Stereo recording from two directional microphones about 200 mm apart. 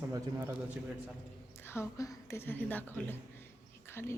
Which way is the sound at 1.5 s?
10° left (ahead or behind).